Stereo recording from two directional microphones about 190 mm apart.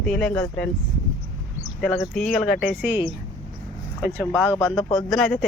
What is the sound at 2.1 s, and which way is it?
Speech, 5° left (ahead or behind).